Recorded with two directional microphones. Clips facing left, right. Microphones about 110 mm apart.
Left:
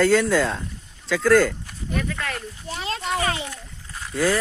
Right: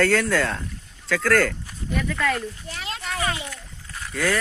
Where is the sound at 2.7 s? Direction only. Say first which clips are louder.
Left 9 dB; 30° left (ahead or behind).